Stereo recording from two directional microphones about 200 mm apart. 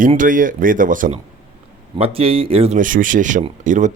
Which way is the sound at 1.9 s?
30° right (ahead or behind).